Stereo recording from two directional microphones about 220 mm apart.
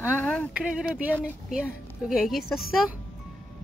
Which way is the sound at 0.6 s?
5° right (ahead or behind).